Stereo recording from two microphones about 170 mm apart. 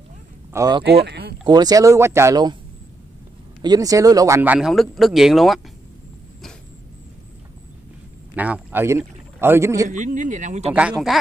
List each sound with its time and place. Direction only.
0.5 s speech: 20° right (ahead or behind)
0.8 s speech: 75° right (ahead or behind)
1.4 s speech: 25° right (ahead or behind)
3.6 s speech: 20° right (ahead or behind); by 5.6 s centre (ahead or behind)
8.4 s a man's voice: 10° right (ahead or behind)
9.8 s speech: 45° right (ahead or behind)
10.7 s speech: 5° right (ahead or behind)